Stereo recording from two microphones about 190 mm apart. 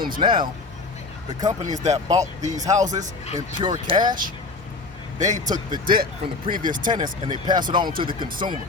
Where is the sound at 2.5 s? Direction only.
20° right (ahead or behind).